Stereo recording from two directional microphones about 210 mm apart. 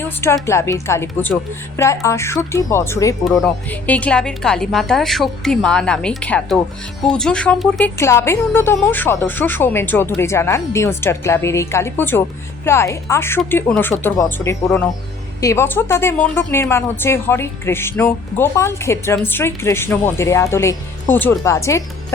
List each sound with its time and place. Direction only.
0.4 s a woman's voice: 15° left (ahead or behind)